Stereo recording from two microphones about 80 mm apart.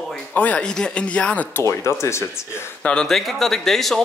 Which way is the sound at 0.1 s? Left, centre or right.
Centre.